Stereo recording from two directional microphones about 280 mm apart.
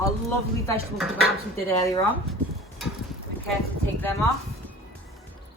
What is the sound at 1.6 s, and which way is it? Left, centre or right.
Speech, centre.